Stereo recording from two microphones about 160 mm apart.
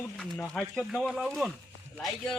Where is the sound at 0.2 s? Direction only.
5° left (ahead or behind).